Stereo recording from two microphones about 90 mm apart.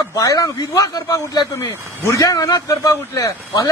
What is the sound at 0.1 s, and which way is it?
Speech, 40° left (ahead or behind).